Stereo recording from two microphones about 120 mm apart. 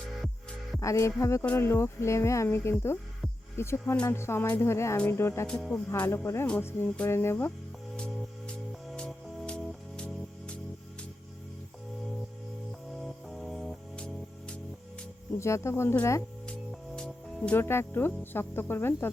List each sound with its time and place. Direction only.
0.8 s speech: 25° left (ahead or behind)
5.5 s music: 10° left (ahead or behind)
5.9 s speech: 25° left (ahead or behind)
7.9 s music: 10° left (ahead or behind)
13.0 s music: centre (ahead or behind)
15.4 s speech: 25° left (ahead or behind)
16.5 s speech: 10° left (ahead or behind)